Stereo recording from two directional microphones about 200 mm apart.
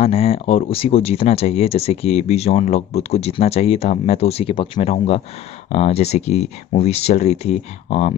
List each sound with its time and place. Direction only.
0.0 s speech: 30° left (ahead or behind)